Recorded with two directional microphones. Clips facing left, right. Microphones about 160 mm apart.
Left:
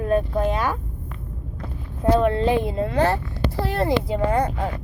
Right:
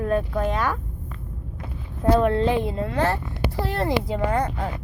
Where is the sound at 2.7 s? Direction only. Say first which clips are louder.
Left 3 dB; 15° left (ahead or behind).